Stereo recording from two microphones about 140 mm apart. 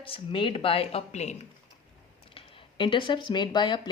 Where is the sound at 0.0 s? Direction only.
40° left (ahead or behind).